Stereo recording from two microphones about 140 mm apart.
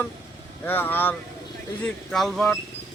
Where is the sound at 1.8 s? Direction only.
Centre (ahead or behind).